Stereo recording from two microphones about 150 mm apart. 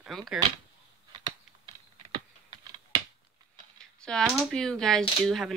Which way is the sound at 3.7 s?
5° left (ahead or behind).